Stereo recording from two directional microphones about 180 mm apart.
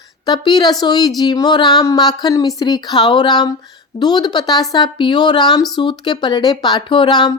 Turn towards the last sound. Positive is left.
turn(degrees=25)  # may be behind; listen again after turning